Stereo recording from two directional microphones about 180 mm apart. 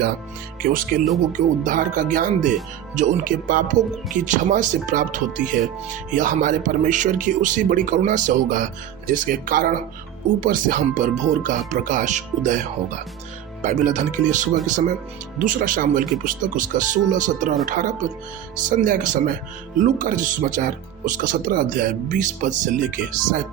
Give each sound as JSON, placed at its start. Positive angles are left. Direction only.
{"t": 0.6, "sound": "speech", "side_deg": -50}